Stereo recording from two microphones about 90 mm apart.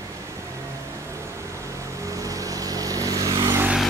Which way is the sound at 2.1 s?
40° right (ahead or behind).